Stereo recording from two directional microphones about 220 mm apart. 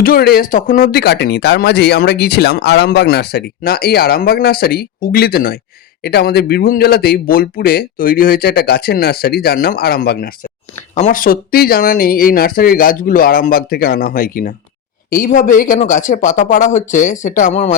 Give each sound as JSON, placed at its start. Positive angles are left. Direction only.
{"t": 0.0, "sound": "speech", "side_deg": 45}